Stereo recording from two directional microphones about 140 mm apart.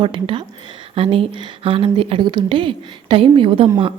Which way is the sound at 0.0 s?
35° right (ahead or behind).